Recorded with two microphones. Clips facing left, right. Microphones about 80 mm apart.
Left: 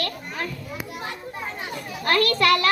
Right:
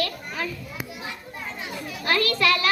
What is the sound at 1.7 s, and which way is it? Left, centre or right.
Speech, left.